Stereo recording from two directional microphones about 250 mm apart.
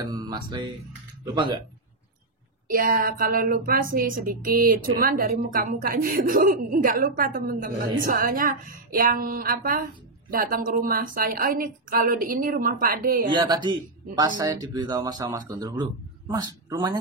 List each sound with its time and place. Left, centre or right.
0.0 s speech: centre
2.7 s speech: right
13.3 s speech: centre